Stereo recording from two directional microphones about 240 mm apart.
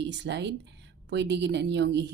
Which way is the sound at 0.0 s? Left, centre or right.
Right.